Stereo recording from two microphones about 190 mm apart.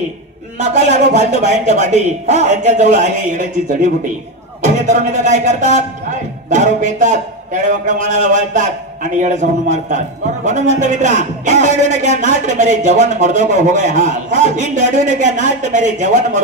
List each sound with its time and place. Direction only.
0.6 s speech: 40° right (ahead or behind)